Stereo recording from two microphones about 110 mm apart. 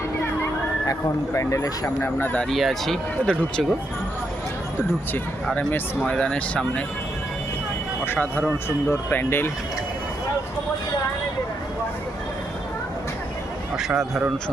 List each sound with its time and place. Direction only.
0.9 s speech: 30° left (ahead or behind)
2.0 s speech: 20° left (ahead or behind)
2.5 s speech: centre (ahead or behind)
5.5 s speech: 15° left (ahead or behind)
8.0 s speech: 20° left (ahead or behind)
13.7 s speech: 5° right (ahead or behind)